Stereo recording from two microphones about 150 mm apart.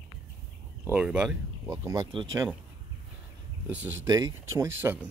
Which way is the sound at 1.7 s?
20° right (ahead or behind).